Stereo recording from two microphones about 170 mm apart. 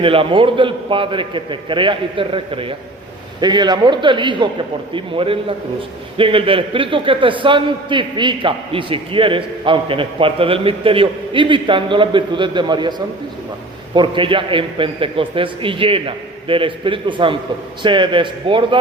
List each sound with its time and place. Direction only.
0.0 s a man's voice: 30° right (ahead or behind)
13.9 s a man's voice: 30° right (ahead or behind)